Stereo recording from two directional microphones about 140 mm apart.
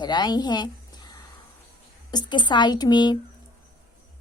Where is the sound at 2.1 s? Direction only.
35° left (ahead or behind).